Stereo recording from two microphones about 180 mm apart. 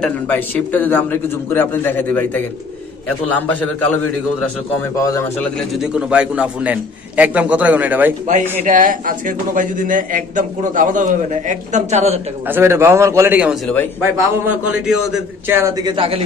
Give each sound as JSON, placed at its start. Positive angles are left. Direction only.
{"t": 0.0, "sound": "a man's voice", "side_deg": 10}
{"t": 4.9, "sound": "a man's voice", "side_deg": 15}
{"t": 5.8, "sound": "a man's voice", "side_deg": -5}
{"t": 8.3, "sound": "a man's voice", "side_deg": -45}
{"t": 12.4, "sound": "a man's voice", "side_deg": -15}
{"t": 15.8, "sound": "speech", "side_deg": -30}